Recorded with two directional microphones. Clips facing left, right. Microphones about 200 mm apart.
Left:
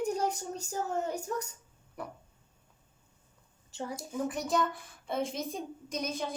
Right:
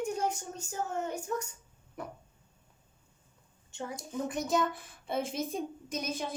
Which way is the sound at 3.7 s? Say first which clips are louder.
Left 1 dB; 35° left (ahead or behind).